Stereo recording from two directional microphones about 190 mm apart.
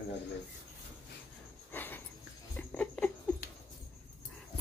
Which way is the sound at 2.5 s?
10° left (ahead or behind).